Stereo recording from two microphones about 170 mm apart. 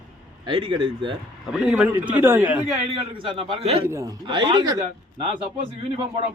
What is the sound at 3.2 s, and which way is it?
Speech, 30° right (ahead or behind).